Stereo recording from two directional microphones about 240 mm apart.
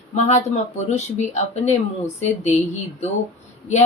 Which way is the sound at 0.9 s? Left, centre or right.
Left.